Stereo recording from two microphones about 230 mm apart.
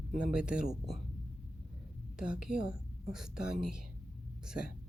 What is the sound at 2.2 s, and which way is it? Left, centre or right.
A woman's voice, centre.